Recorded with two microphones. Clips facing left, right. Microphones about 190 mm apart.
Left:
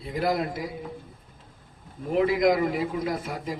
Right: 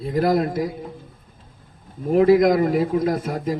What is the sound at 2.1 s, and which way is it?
A man's voice, 45° right (ahead or behind).